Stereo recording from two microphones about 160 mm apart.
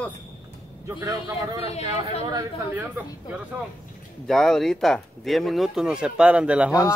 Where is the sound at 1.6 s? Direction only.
40° left (ahead or behind).